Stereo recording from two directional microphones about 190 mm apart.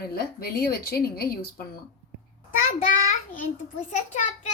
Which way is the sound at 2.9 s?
45° left (ahead or behind).